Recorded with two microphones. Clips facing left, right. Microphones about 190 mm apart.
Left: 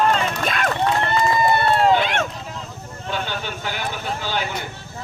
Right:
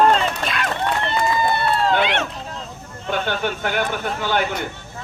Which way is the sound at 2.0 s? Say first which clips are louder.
Right 1 dB; 50° left (ahead or behind).